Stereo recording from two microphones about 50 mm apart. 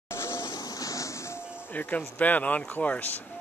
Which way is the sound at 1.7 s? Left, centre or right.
Left.